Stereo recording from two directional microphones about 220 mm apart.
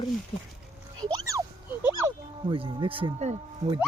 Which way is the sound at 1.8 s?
15° right (ahead or behind).